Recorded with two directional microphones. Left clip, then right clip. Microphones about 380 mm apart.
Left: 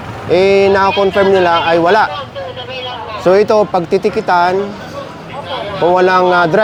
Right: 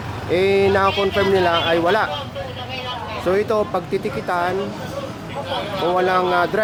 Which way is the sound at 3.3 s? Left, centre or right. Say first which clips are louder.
Left 10 dB; left.